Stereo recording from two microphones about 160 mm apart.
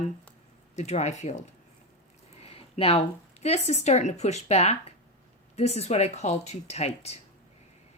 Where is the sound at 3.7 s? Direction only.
45° left (ahead or behind).